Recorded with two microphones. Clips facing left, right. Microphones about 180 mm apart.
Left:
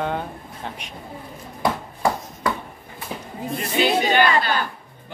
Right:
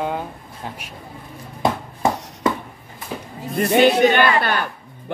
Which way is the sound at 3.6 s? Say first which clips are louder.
Right 7 dB; 60° right (ahead or behind).